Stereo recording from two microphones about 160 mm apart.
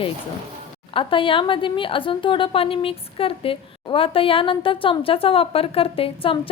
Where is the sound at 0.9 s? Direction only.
35° left (ahead or behind).